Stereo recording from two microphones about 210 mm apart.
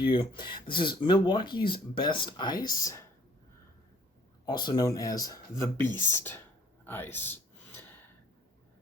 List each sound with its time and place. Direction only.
0.0 s speech: 25° left (ahead or behind)
4.4 s speech: 20° left (ahead or behind)